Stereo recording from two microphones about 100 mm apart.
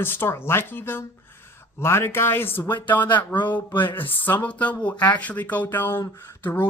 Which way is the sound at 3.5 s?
20° left (ahead or behind).